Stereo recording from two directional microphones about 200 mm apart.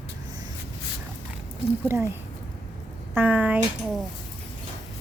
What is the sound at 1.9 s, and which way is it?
Speech, 15° right (ahead or behind).